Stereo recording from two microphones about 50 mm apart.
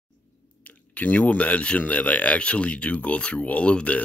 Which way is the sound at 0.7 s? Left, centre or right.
Left.